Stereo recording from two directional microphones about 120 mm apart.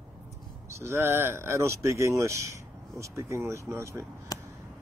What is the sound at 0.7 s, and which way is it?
Speech, 20° right (ahead or behind).